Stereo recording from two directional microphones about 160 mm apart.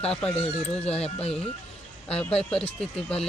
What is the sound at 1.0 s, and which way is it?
Speech, 40° left (ahead or behind).